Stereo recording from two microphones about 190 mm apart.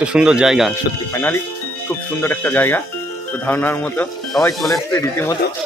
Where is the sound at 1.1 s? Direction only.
10° left (ahead or behind).